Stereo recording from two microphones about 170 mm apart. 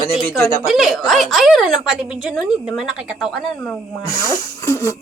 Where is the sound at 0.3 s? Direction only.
15° left (ahead or behind).